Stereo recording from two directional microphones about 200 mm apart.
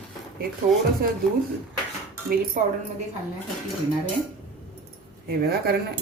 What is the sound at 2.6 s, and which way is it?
Speech, 40° right (ahead or behind).